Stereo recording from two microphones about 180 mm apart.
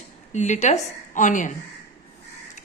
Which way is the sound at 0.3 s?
40° left (ahead or behind).